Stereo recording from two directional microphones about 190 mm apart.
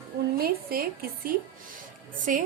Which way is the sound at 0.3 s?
50° right (ahead or behind).